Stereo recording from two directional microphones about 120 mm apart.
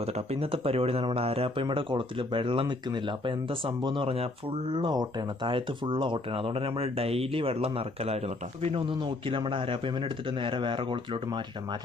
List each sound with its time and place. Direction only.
0.0 s speech: 60° right (ahead or behind)
4.9 s speech: 35° right (ahead or behind); by 8.3 s 60° right (ahead or behind)
8.7 s speech: 40° right (ahead or behind)